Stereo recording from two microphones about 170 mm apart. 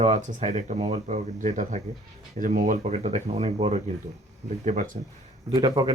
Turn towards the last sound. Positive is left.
turn(degrees=-25)  # may be behind; listen again after turning